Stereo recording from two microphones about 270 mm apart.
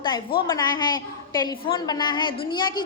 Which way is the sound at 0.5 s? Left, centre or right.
Centre.